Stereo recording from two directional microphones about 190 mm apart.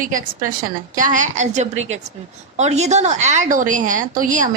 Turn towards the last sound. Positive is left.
turn(degrees=-45)  # may be behind; listen again after turning